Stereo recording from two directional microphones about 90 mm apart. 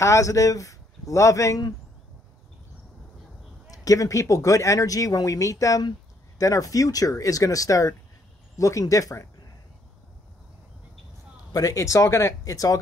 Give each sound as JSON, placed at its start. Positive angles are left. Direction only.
{"t": 0.0, "sound": "speech", "side_deg": 35}
{"t": 3.7, "sound": "speech", "side_deg": 40}
{"t": 11.5, "sound": "speech", "side_deg": 40}